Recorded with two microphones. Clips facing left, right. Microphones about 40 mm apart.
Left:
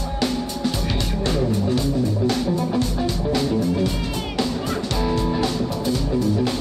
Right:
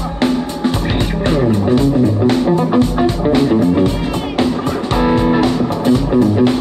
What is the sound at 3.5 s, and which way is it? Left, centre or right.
Music, right.